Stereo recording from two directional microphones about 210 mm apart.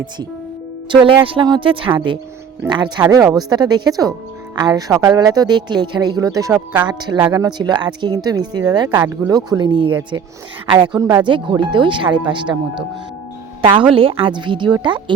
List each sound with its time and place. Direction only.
0.9 s a woman's voice: 25° right (ahead or behind)
13.6 s a woman's voice: 25° right (ahead or behind)